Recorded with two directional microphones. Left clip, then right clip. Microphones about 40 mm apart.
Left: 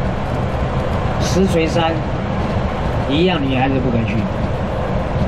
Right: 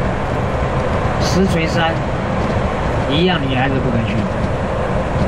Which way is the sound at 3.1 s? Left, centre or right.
Centre.